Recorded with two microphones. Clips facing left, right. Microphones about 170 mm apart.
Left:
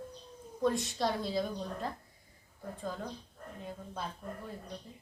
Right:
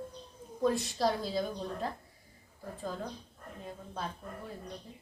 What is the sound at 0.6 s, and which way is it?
A woman's voice, centre (ahead or behind).